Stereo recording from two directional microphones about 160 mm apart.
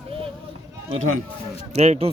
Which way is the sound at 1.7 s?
40° right (ahead or behind).